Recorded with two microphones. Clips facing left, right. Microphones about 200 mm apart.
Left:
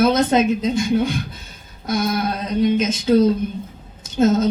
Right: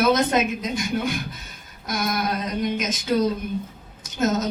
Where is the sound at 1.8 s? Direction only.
30° left (ahead or behind).